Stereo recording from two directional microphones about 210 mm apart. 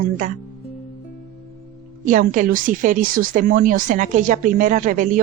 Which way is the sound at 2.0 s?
40° right (ahead or behind).